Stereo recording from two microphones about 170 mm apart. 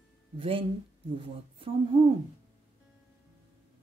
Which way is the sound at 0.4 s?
35° right (ahead or behind).